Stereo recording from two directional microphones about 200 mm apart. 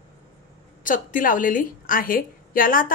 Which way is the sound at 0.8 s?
40° left (ahead or behind).